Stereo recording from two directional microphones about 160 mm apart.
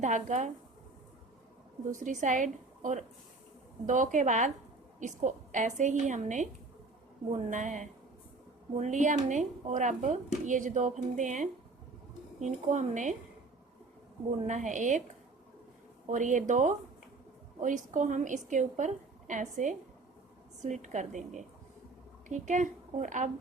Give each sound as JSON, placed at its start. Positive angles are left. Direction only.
{"t": 0.0, "sound": "speech", "side_deg": -50}
{"t": 1.9, "sound": "speech", "side_deg": -50}
{"t": 14.3, "sound": "speech", "side_deg": -50}
{"t": 16.0, "sound": "a woman's voice", "side_deg": -50}